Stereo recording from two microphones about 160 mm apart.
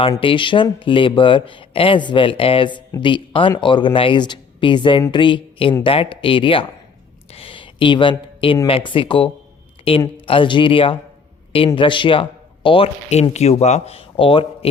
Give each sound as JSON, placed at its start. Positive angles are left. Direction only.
{"t": 0.2, "sound": "speech", "side_deg": 30}
{"t": 7.3, "sound": "a sound", "side_deg": 35}
{"t": 8.6, "sound": "speech", "side_deg": 35}